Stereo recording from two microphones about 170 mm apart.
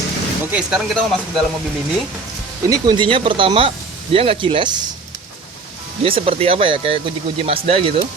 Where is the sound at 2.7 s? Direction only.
25° right (ahead or behind).